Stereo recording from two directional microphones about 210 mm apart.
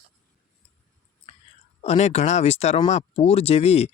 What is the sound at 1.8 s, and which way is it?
Speech, 30° left (ahead or behind).